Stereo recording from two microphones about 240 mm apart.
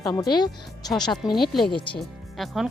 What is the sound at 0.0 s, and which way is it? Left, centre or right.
Speech, centre.